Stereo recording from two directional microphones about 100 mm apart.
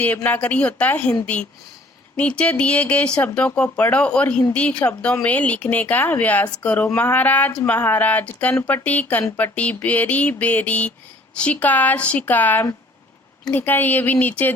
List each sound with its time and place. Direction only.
0.2 s speech: 15° left (ahead or behind)
2.1 s a woman's voice: 10° left (ahead or behind)